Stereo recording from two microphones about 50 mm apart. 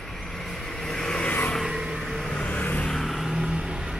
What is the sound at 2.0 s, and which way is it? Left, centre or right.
Vehicle, centre.